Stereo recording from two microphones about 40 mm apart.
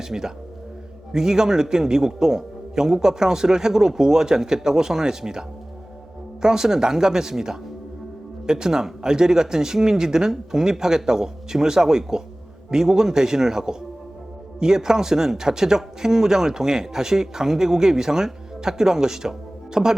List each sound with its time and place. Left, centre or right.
0.0 s speech: centre